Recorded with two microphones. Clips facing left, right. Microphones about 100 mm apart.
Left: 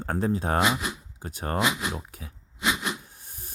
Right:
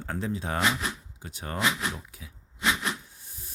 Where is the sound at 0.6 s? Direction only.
10° left (ahead or behind).